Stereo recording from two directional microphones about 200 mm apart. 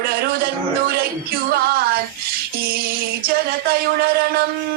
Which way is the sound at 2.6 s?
50° right (ahead or behind).